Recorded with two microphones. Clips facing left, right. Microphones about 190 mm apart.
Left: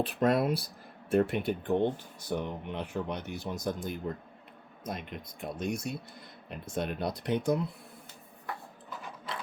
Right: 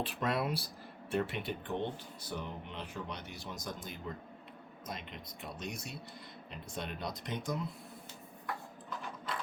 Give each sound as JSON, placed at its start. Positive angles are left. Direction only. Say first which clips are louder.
{"t": 0.0, "sound": "speech", "louder": "left 8 dB", "side_deg": 50}